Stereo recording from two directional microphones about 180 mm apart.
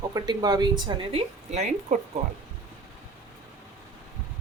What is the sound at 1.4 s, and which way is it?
Speech, 40° right (ahead or behind).